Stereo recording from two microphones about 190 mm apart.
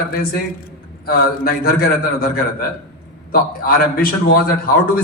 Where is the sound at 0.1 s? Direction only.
55° left (ahead or behind).